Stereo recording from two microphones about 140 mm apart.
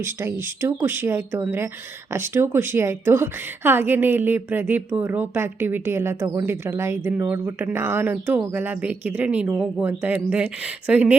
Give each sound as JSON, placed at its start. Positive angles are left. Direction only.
{"t": 0.0, "sound": "a woman's voice", "side_deg": -15}